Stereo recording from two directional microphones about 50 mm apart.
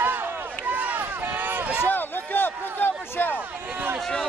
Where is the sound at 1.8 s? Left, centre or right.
Left.